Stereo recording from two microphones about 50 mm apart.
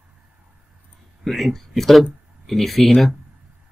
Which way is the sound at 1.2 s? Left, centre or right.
Centre.